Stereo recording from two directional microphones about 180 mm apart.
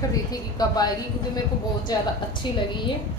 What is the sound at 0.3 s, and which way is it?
A woman's voice, 20° left (ahead or behind).